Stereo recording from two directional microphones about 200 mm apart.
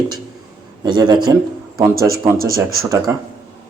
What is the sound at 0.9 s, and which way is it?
Speech, 20° right (ahead or behind).